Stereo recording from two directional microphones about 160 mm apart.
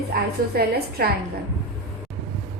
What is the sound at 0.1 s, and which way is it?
A woman's voice, 75° right (ahead or behind).